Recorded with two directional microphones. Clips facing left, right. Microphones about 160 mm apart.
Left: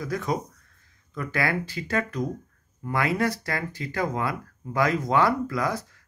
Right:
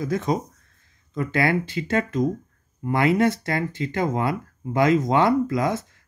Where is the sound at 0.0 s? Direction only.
20° right (ahead or behind).